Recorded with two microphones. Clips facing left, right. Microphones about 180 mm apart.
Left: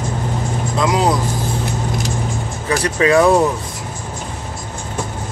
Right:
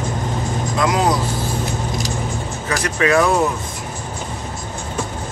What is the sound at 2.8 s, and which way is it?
Speech, 30° left (ahead or behind).